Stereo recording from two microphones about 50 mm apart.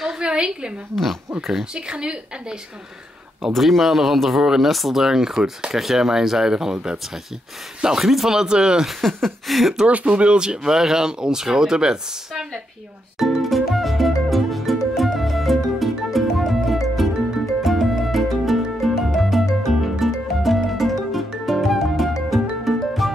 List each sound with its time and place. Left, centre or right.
0.2 s a sound: centre
1.5 s speech: centre
3.4 s speech: centre
8.0 s speech: centre
8.8 s speech: centre
9.8 s speech: right
13.2 s music: centre